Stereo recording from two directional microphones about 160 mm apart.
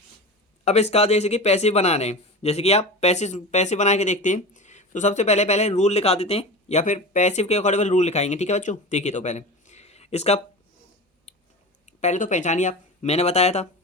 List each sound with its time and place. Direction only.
0.6 s speech: 40° left (ahead or behind)
11.9 s speech: 45° left (ahead or behind)